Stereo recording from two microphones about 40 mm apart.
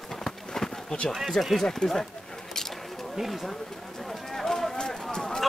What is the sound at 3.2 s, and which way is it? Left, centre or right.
Speech, centre.